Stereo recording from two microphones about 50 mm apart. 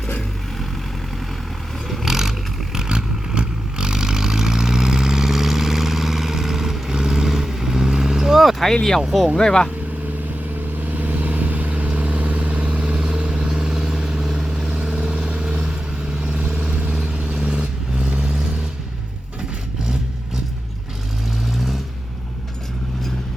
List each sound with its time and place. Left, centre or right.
1.9 s vehicle: centre
2.7 s vehicle: centre
8.7 s speech: centre
9.4 s speech: centre
10.8 s vehicle: right; by 18.3 s centre